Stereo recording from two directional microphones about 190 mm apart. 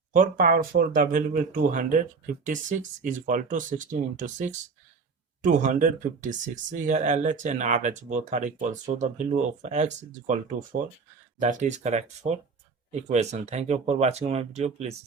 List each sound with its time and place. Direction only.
0.1 s speech: 45° right (ahead or behind)